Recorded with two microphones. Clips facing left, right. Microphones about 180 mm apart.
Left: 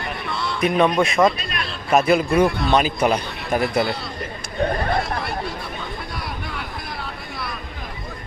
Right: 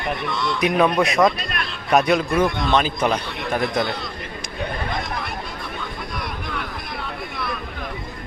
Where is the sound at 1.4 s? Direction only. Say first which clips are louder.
Right 1 dB; 55° right (ahead or behind).